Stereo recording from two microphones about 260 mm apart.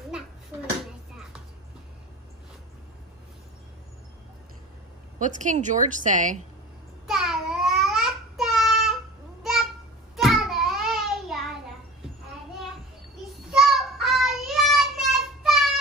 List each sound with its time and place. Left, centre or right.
5.2 s a woman's voice: right
7.1 s babbling: centre
9.4 s a sound: centre
13.5 s child singing: centre